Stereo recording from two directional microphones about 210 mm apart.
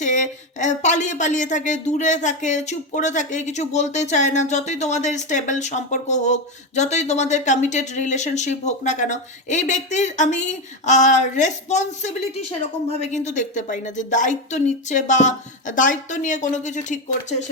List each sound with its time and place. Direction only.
0.0 s speech: 35° left (ahead or behind)